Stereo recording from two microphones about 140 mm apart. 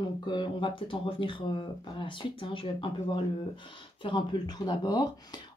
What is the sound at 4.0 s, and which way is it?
Speech, 35° left (ahead or behind).